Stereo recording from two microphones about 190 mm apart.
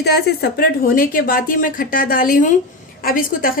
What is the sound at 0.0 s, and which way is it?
A woman's voice, 55° left (ahead or behind).